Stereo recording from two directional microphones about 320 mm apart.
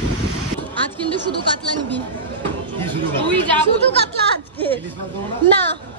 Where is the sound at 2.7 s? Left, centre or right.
Centre.